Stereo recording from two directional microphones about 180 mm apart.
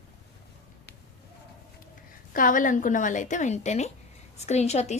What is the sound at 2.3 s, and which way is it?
A woman's voice, 50° left (ahead or behind).